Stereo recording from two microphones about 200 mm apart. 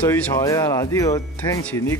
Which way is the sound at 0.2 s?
15° left (ahead or behind).